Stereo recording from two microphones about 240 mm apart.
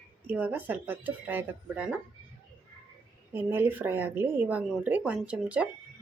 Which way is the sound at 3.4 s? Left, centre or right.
Centre.